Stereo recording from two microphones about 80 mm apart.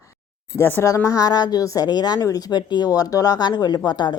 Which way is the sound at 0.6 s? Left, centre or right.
Left.